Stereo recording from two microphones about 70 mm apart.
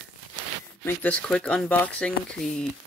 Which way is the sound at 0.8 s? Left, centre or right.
Left.